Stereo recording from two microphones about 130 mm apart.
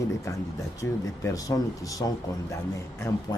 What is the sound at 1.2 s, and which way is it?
Speech, 25° left (ahead or behind).